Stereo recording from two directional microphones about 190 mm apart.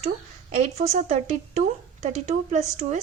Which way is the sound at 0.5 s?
35° right (ahead or behind).